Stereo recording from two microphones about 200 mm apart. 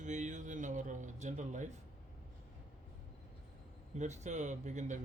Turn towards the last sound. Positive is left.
turn(degrees=-35)  # may be behind; listen again after turning